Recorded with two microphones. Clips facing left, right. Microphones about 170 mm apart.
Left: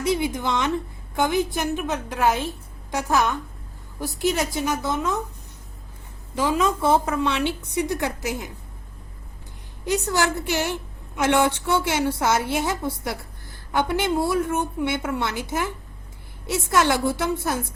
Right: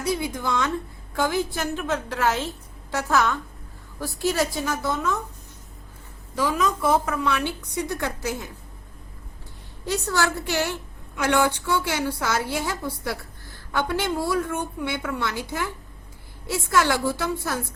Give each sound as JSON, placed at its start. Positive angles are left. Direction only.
{"t": 0.0, "sound": "a woman's voice", "side_deg": 20}
{"t": 6.3, "sound": "a woman's voice", "side_deg": 25}
{"t": 9.8, "sound": "a woman's voice", "side_deg": 20}